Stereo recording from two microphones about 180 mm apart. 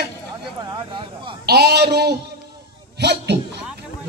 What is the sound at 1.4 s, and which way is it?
A man's voice, 65° right (ahead or behind).